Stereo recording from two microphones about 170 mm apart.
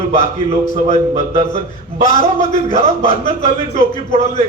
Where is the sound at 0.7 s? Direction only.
40° right (ahead or behind).